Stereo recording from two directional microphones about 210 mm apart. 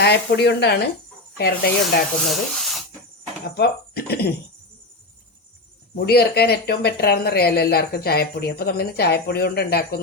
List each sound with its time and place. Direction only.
0.0 s speech: 55° left (ahead or behind)
2.2 s speech: centre (ahead or behind)
3.6 s speech: 50° left (ahead or behind)
6.0 s speech: 50° left (ahead or behind)